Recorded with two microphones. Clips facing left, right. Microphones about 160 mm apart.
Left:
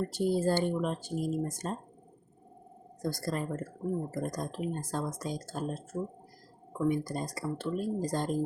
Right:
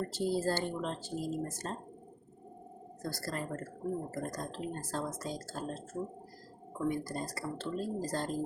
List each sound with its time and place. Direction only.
0.1 s speech: 15° left (ahead or behind)
3.0 s speech: 15° left (ahead or behind)